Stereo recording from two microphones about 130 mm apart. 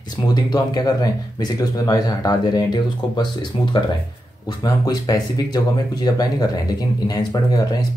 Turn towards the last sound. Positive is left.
turn(degrees=30)  # may be behind; listen again after turning